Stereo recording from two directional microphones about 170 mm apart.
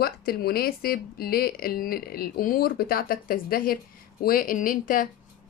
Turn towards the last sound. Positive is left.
turn(degrees=55)  # may be behind; listen again after turning